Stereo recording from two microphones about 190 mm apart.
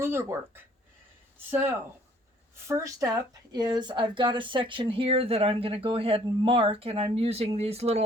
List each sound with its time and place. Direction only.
0.0 s speech: 15° right (ahead or behind); by 8.0 s 35° right (ahead or behind)